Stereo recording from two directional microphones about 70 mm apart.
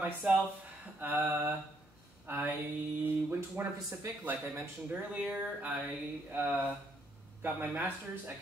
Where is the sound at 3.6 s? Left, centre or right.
Right.